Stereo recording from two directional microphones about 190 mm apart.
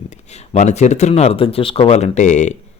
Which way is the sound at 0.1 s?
35° left (ahead or behind).